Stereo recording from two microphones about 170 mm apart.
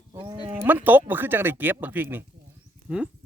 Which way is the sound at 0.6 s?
10° right (ahead or behind).